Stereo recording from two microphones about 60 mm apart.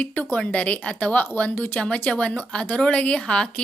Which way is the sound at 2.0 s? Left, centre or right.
Left.